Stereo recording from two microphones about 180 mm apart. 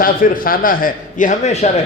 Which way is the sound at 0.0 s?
50° left (ahead or behind).